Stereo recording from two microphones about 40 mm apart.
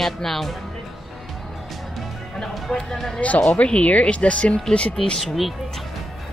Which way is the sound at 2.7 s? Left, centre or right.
Centre.